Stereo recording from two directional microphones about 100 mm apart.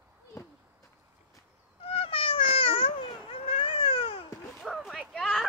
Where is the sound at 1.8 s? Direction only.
70° left (ahead or behind).